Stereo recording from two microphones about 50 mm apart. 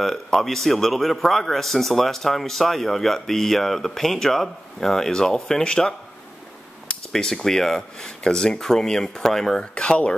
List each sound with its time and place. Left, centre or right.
0.0 s a man's voice: centre
7.1 s a man's voice: centre
9.6 s speech: left